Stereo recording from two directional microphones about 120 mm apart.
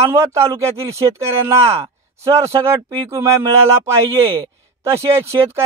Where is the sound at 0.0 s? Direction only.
25° right (ahead or behind).